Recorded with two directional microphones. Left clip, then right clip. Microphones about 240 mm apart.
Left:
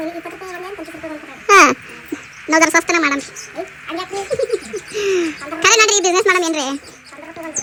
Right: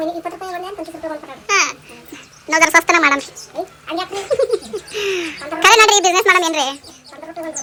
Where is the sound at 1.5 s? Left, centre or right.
Centre.